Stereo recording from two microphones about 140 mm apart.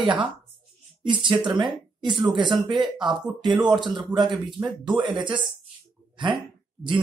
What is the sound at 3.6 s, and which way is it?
Speech, 30° right (ahead or behind).